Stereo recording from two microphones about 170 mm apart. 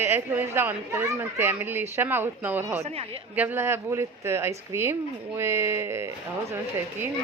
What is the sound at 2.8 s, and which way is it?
Speech, 35° right (ahead or behind).